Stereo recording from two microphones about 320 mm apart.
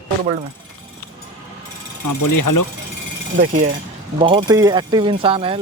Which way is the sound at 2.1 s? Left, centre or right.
Left.